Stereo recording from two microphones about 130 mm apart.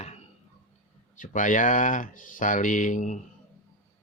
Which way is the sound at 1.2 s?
80° left.